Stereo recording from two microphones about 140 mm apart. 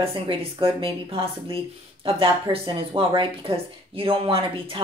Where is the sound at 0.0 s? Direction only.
40° right (ahead or behind).